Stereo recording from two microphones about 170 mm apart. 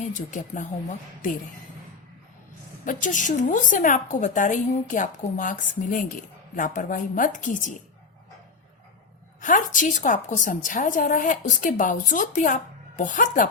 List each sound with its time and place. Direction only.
0.0 s a woman's voice: 50° left (ahead or behind)
2.8 s a woman's voice: 50° left (ahead or behind)
9.4 s a woman's voice: 50° left (ahead or behind)